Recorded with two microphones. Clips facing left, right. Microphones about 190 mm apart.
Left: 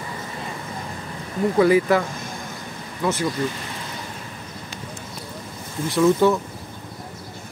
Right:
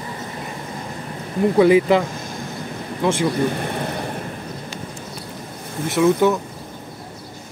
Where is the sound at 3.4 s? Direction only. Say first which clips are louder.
Right 7 dB; 60° right (ahead or behind).